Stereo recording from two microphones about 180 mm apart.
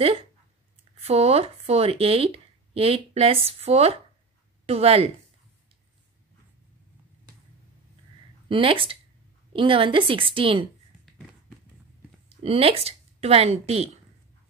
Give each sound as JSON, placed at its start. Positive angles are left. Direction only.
{"t": 1.0, "sound": "speech", "side_deg": -35}
{"t": 8.5, "sound": "a woman's voice", "side_deg": -30}
{"t": 12.3, "sound": "a woman's voice", "side_deg": -35}